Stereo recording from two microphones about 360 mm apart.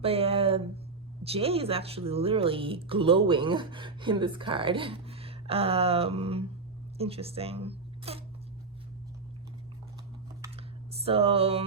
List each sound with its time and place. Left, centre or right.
0.0 s speech: centre
10.9 s music: centre